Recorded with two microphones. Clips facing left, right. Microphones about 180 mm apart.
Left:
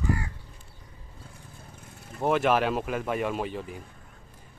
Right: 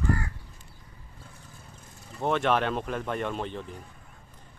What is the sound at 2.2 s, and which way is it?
Speech, 5° left (ahead or behind).